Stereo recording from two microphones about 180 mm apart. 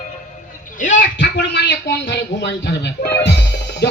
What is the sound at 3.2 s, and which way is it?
Music, 75° left (ahead or behind).